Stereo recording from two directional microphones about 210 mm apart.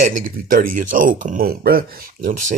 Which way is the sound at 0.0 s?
40° right (ahead or behind).